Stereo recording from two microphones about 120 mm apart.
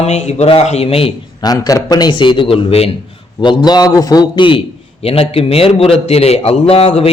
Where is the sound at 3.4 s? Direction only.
40° left (ahead or behind).